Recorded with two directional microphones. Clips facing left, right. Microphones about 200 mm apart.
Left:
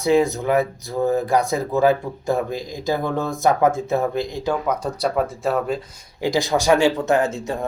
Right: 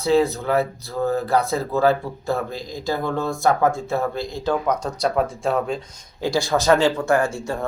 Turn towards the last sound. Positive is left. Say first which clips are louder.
# left 1 dB
turn(degrees=20)  # may be behind; listen again after turning